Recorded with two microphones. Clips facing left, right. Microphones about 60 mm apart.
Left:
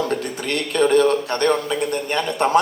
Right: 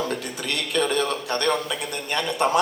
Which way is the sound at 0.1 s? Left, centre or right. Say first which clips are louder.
Left 5 dB; left.